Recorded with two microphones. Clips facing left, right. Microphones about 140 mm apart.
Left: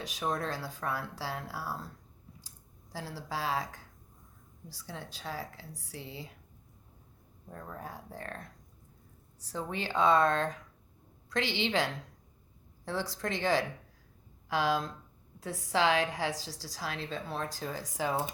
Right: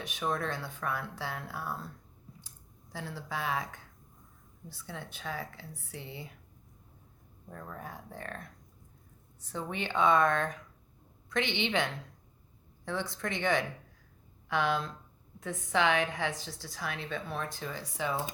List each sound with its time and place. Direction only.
0.2 s speech: 35° left (ahead or behind)
2.9 s speech: 35° left (ahead or behind)
5.9 s speech: 55° right (ahead or behind)
7.5 s speech: 35° left (ahead or behind)
12.8 s speech: 35° left (ahead or behind)